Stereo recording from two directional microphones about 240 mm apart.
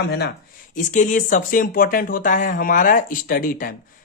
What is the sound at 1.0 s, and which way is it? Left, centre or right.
Speech, left.